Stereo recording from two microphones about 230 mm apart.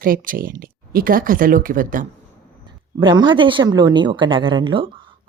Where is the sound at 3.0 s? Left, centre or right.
Centre.